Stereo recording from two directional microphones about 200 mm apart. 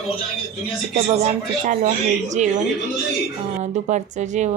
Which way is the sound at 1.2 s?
40° right (ahead or behind).